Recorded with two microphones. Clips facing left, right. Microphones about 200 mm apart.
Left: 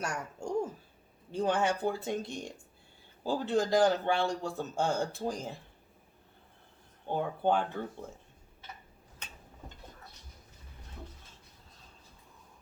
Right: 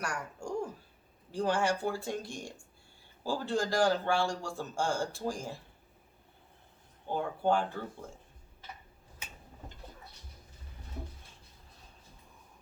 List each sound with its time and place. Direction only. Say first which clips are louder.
0.0 s a man's voice: left 1 dB; 20° left (ahead or behind)
7.1 s a man's voice: left 1 dB; 20° left (ahead or behind)
9.2 s tick-tock: right 1 dB; 5° right (ahead or behind)